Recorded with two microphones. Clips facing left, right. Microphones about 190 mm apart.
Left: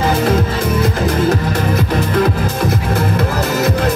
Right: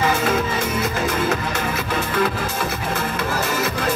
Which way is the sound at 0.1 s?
35° left (ahead or behind).